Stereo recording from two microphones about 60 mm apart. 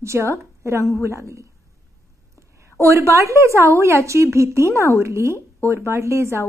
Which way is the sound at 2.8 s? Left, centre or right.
Right.